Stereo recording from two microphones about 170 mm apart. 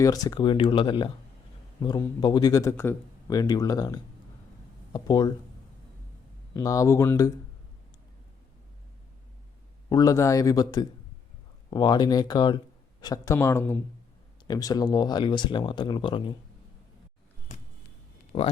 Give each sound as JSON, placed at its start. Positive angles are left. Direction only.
{"t": 0.0, "sound": "speech", "side_deg": 20}
{"t": 2.2, "sound": "speech", "side_deg": 25}
{"t": 6.5, "sound": "speech", "side_deg": 20}
{"t": 9.9, "sound": "speech", "side_deg": 20}
{"t": 18.3, "sound": "speech", "side_deg": 30}